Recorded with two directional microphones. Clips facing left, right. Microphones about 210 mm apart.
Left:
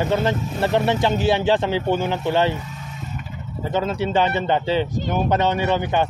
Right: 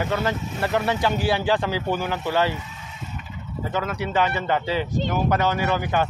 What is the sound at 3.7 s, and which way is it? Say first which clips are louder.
Speech: left 4 dB; 25° left (ahead or behind).